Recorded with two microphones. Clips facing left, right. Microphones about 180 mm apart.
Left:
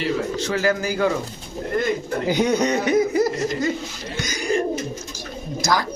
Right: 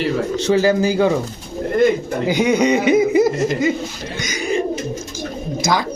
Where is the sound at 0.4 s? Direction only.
25° right (ahead or behind).